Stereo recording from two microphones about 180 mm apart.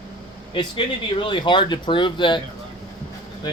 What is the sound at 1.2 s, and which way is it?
Speech, 25° left (ahead or behind).